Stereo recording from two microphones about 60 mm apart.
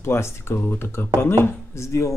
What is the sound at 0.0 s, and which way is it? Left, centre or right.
Speech, left.